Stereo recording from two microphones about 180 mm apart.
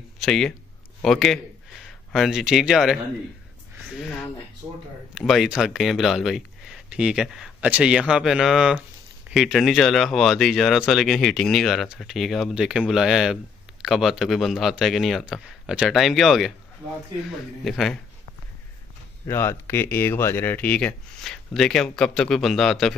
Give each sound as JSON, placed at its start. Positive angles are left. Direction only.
{"t": 0.2, "sound": "speech", "side_deg": 5}
{"t": 17.6, "sound": "speech", "side_deg": 0}
{"t": 19.2, "sound": "speech", "side_deg": 15}